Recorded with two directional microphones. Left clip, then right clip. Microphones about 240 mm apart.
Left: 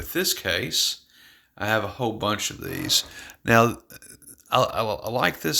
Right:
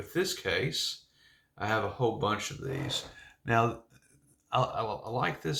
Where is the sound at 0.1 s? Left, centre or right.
Left.